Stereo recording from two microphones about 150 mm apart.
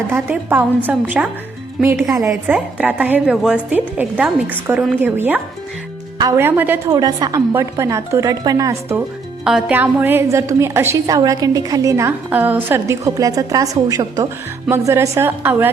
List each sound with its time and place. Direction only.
0.1 s a woman's voice: 15° right (ahead or behind)
2.3 s a woman's voice: 10° right (ahead or behind)
6.9 s a woman's voice: 25° right (ahead or behind)
9.4 s a woman's voice: 5° right (ahead or behind)